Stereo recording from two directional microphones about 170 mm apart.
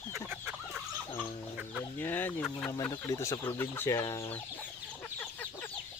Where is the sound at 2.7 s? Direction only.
20° left (ahead or behind).